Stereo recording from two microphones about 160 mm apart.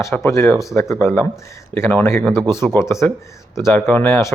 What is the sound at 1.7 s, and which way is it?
Speech, 15° left (ahead or behind).